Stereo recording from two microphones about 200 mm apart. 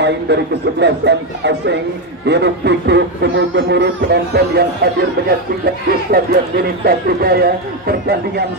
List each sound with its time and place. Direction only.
0.0 s speech: 60° right (ahead or behind)
5.9 s speech: 50° right (ahead or behind)